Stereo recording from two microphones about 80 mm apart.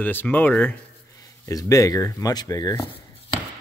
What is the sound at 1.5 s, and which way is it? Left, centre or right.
Speech, left.